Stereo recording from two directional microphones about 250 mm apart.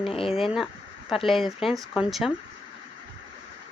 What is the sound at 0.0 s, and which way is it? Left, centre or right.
Speech, left.